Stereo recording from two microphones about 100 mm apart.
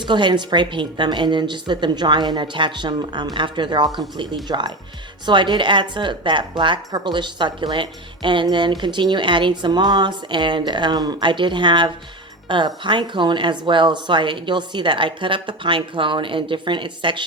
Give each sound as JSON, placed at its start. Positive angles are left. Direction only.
{"t": 0.0, "sound": "speech", "side_deg": -50}